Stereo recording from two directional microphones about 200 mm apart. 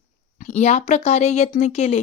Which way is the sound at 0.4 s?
35° left (ahead or behind).